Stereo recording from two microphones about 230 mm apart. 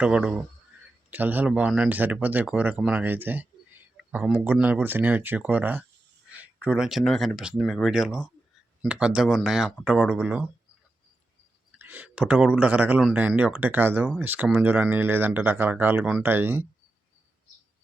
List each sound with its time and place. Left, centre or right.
0.0 s speech: centre
11.8 s speech: centre